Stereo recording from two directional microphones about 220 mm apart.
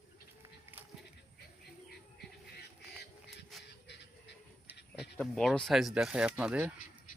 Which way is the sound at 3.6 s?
50° left (ahead or behind).